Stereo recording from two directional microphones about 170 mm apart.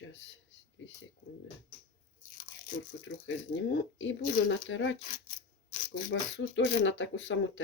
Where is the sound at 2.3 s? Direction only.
50° left (ahead or behind).